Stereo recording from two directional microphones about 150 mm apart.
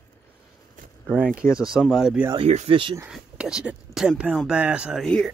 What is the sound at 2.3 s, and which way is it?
Speech, 45° right (ahead or behind).